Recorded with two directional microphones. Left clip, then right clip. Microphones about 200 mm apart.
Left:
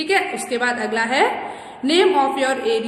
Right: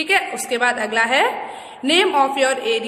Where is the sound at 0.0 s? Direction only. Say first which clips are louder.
Right 1 dB; 25° right (ahead or behind).